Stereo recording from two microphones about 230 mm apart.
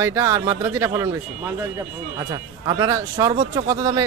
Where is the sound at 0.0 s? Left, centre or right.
Centre.